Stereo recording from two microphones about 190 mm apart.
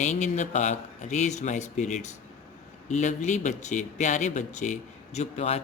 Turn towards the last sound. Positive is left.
turn(degrees=35)  # may be behind; listen again after turning